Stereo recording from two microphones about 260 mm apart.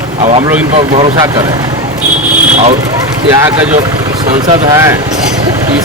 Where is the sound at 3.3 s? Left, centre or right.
Centre.